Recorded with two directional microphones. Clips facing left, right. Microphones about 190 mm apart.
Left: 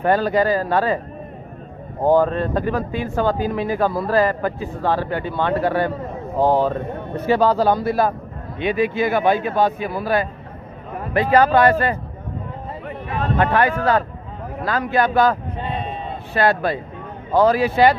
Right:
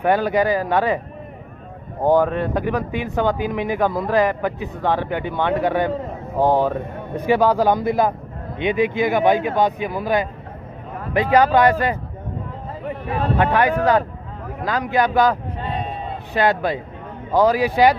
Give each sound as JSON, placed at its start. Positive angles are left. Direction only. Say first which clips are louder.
{"t": 0.0, "sound": "speech", "louder": "even", "side_deg": -15}
{"t": 2.0, "sound": "speech", "louder": "left 1 dB", "side_deg": -15}
{"t": 13.4, "sound": "speech", "louder": "even", "side_deg": -15}
{"t": 16.3, "sound": "speech", "louder": "even", "side_deg": -15}